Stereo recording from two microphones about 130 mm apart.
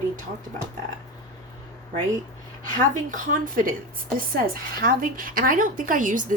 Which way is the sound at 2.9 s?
85° right.